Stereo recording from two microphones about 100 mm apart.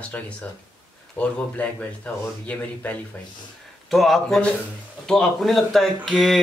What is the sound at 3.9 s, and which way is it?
Speech, centre (ahead or behind).